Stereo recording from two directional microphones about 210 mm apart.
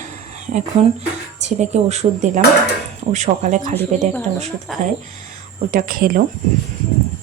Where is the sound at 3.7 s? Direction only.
10° left (ahead or behind).